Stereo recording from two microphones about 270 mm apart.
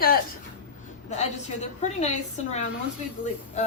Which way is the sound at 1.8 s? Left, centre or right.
Left.